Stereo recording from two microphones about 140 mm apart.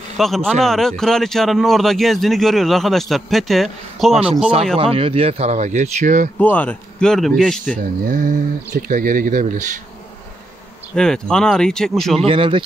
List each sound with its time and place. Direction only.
0.2 s a man's voice: centre (ahead or behind)
4.7 s speech: 45° right (ahead or behind); by 6.3 s 65° right (ahead or behind)
6.3 s a man's voice: 10° left (ahead or behind)
7.7 s speech: 75° right (ahead or behind)
11.0 s a man's voice: 5° left (ahead or behind)
12.3 s speech: 40° right (ahead or behind)